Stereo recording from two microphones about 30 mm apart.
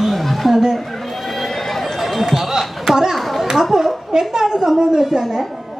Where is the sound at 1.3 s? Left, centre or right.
Centre.